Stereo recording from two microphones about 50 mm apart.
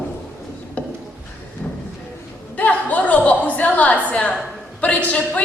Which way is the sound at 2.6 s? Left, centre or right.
Left.